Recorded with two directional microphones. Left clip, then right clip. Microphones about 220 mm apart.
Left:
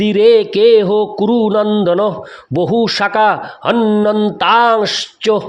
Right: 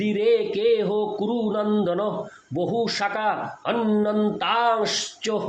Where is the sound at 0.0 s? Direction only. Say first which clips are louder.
Left 11 dB; 50° left (ahead or behind).